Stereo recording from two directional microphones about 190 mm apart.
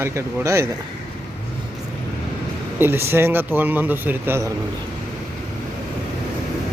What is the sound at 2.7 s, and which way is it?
Speech, 10° right (ahead or behind).